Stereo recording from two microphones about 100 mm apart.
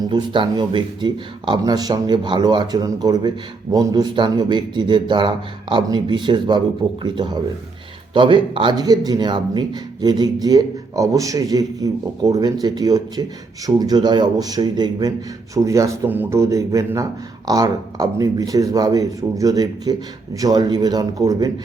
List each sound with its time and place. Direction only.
0.1 s a man's voice: 50° right (ahead or behind)
15.5 s a man's voice: 30° right (ahead or behind)